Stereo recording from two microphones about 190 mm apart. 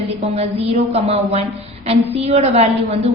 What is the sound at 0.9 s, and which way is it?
A woman's voice, 30° right (ahead or behind).